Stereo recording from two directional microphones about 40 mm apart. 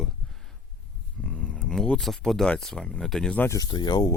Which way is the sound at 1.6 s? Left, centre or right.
Centre.